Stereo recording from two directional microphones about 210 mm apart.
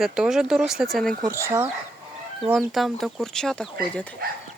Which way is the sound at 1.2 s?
15° right (ahead or behind).